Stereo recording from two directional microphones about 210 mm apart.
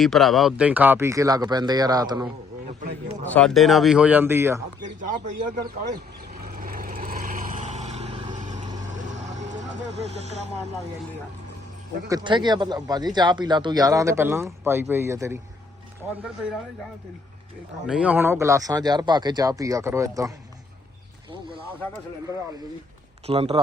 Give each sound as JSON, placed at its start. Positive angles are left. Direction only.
{"t": 0.0, "sound": "speech", "side_deg": 0}
{"t": 3.2, "sound": "speech", "side_deg": 5}
{"t": 4.9, "sound": "speech", "side_deg": -40}
{"t": 6.4, "sound": "vehicle", "side_deg": -45}
{"t": 9.9, "sound": "speech", "side_deg": -30}
{"t": 12.0, "sound": "speech", "side_deg": -20}
{"t": 17.8, "sound": "speech", "side_deg": -5}
{"t": 23.2, "sound": "speech", "side_deg": -30}